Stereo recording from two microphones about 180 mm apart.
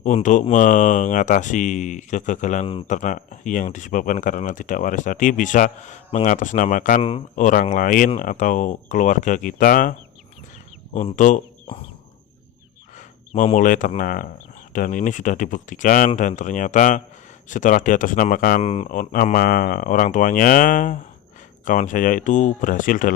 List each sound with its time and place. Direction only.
0.0 s speech: 45° left (ahead or behind)
10.9 s speech: 45° left (ahead or behind)
13.0 s speech: 45° left (ahead or behind)
18.6 s speech: 35° left (ahead or behind)
18.9 s speech: 50° left (ahead or behind)